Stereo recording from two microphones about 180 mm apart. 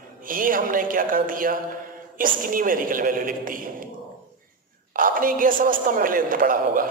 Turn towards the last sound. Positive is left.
turn(degrees=-50)  # may be behind; listen again after turning